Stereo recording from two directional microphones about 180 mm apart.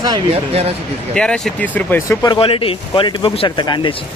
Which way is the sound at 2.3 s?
30° left (ahead or behind).